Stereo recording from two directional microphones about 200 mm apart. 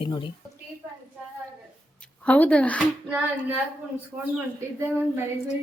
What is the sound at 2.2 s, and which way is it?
Speech, 5° left (ahead or behind).